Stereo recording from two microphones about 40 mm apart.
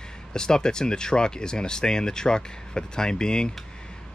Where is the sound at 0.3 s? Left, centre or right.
Centre.